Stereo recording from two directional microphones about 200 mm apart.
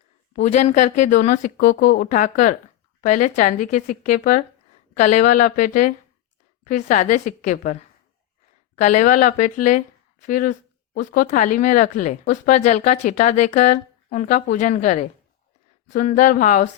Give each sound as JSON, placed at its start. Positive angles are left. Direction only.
{"t": 0.3, "sound": "speech", "side_deg": 35}